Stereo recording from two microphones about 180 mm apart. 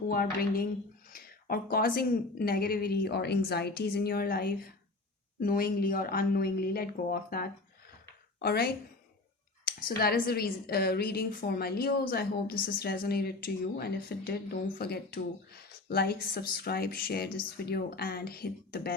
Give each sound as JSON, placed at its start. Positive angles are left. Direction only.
{"t": 0.1, "sound": "a woman's voice", "side_deg": 55}